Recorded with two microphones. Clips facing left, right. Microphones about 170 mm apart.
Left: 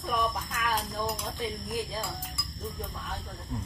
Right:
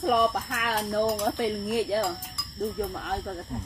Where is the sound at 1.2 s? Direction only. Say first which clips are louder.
Right 8 dB; 70° right (ahead or behind).